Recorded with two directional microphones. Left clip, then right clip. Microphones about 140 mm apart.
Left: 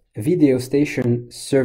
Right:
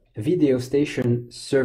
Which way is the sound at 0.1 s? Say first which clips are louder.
Left 3 dB; 40° left (ahead or behind).